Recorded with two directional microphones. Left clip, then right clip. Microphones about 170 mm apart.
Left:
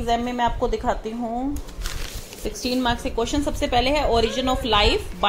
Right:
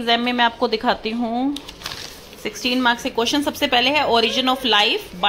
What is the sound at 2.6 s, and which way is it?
A woman's voice, centre (ahead or behind).